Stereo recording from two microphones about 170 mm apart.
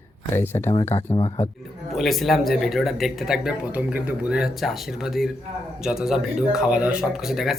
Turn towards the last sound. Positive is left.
turn(degrees=0)  # may be behind; listen again after turning